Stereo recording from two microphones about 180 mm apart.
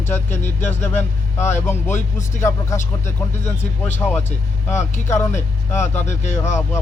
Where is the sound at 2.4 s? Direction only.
15° left (ahead or behind).